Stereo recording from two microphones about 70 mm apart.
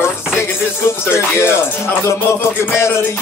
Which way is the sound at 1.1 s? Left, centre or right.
Left.